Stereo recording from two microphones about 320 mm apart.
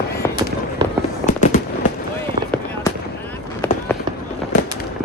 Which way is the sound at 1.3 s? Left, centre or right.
Left.